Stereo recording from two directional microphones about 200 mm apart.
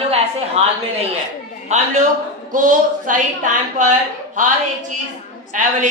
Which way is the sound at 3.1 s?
40° right (ahead or behind).